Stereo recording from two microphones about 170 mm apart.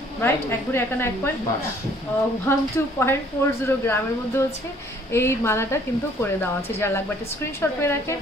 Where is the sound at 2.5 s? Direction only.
15° left (ahead or behind).